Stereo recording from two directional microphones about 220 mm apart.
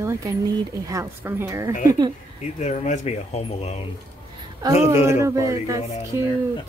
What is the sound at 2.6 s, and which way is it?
Speech, 30° left (ahead or behind).